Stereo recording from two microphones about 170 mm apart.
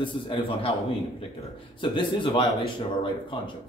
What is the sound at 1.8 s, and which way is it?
Speech, 30° left (ahead or behind).